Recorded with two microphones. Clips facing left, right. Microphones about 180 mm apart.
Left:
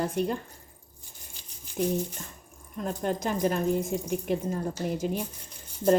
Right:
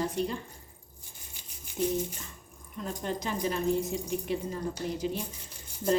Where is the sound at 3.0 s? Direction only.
50° left (ahead or behind).